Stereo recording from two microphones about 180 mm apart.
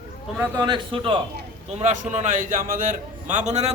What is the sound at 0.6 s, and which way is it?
A man's voice, 25° right (ahead or behind).